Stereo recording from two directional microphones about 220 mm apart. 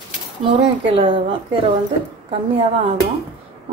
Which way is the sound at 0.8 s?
25° right (ahead or behind).